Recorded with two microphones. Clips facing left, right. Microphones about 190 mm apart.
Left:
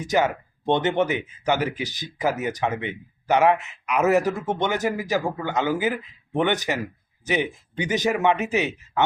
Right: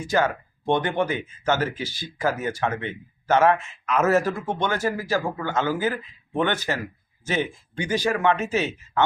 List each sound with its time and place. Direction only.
0.0 s speech: 20° left (ahead or behind)